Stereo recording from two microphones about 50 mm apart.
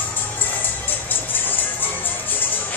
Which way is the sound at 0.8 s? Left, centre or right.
Left.